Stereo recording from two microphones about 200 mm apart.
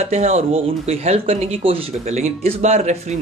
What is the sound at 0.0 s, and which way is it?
Speech, 35° right (ahead or behind).